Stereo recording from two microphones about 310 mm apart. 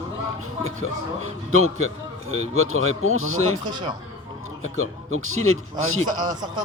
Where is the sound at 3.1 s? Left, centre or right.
Right.